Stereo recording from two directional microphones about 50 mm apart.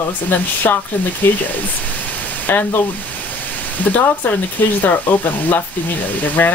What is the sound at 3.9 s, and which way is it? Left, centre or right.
Speech, left.